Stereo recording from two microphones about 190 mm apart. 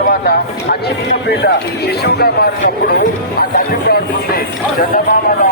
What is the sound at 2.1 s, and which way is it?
Speech, 55° left (ahead or behind).